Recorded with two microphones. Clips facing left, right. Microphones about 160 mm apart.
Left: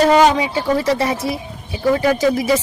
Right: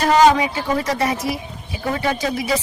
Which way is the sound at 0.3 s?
30° left (ahead or behind).